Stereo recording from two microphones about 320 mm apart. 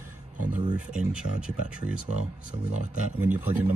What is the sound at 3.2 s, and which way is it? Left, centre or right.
Speech, centre.